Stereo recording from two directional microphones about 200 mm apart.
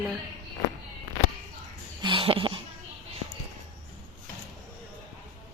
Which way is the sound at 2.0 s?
25° right (ahead or behind).